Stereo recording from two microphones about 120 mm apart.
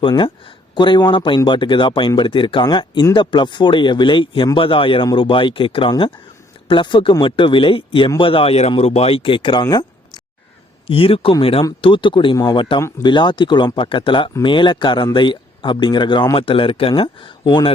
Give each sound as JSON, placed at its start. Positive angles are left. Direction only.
{"t": 0.8, "sound": "speech", "side_deg": 40}
{"t": 10.8, "sound": "speech", "side_deg": 50}